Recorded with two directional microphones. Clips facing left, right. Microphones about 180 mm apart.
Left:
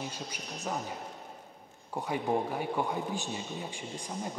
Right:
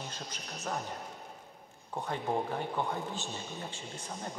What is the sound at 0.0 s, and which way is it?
Speech, 10° left (ahead or behind).